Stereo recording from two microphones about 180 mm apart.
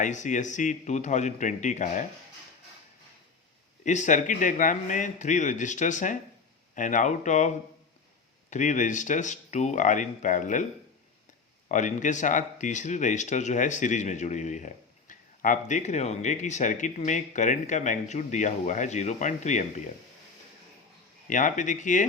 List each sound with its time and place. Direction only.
0.0 s speech: 45° left (ahead or behind)
3.8 s speech: 40° left (ahead or behind)
11.7 s speech: 45° left (ahead or behind)
21.2 s speech: 45° left (ahead or behind)